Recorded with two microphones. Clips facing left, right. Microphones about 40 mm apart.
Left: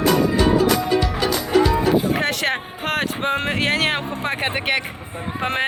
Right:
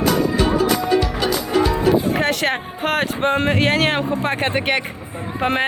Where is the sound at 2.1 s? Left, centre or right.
Centre.